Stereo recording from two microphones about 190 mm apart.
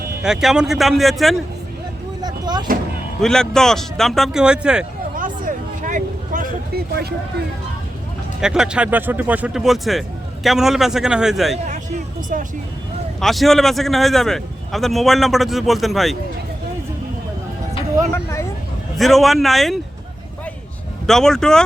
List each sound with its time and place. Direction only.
0.2 s a man's voice: 5° right (ahead or behind)
2.2 s a sound: 20° right (ahead or behind)
3.2 s a man's voice: 5° left (ahead or behind)
5.1 s a sound: 45° right (ahead or behind)
8.4 s a man's voice: 5° right (ahead or behind)
12.3 s speech: 45° right (ahead or behind)
13.1 s a man's voice: centre (ahead or behind)
18.1 s speech: 15° left (ahead or behind)
18.9 s a man's voice: centre (ahead or behind)
21.1 s a man's voice: 5° left (ahead or behind)